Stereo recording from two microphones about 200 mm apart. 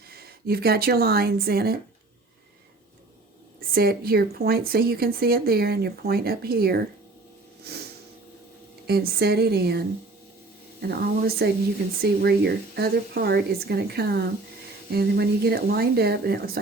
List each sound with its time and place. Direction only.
0.1 s speech: 50° right (ahead or behind)
3.7 s speech: 50° right (ahead or behind)
7.7 s a sound: 55° right (ahead or behind)
8.9 s speech: 50° right (ahead or behind)